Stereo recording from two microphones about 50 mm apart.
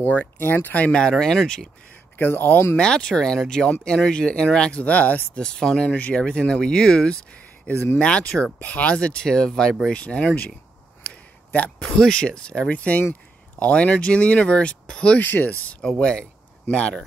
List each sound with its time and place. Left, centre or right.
0.4 s speech: left
0.7 s speech: left
1.1 s speech: centre
2.1 s speech: left
2.8 s speech: centre
5.3 s speech: centre
5.9 s speech: left
7.7 s speech: left
12.0 s speech: centre
15.1 s speech: left
16.0 s speech: centre